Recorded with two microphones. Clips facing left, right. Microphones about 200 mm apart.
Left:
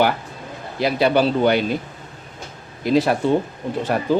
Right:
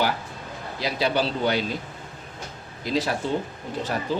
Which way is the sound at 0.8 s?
55° left (ahead or behind).